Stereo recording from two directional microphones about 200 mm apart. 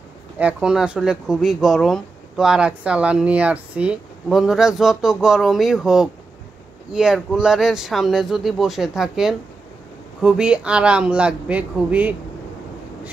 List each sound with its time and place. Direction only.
0.4 s speech: 5° right (ahead or behind)